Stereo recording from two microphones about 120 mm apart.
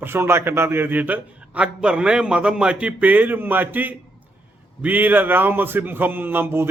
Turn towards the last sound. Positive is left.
turn(degrees=-20)  # may be behind; listen again after turning